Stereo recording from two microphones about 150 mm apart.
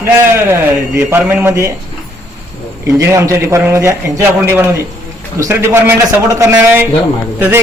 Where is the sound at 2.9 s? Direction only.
20° right (ahead or behind).